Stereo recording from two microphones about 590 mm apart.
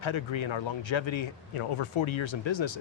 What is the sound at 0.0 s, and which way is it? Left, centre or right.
Speech, left.